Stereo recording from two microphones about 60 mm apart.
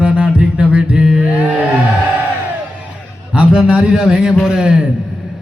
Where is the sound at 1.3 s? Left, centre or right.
Right.